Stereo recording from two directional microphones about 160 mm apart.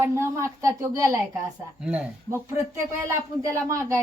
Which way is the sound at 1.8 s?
10° right (ahead or behind).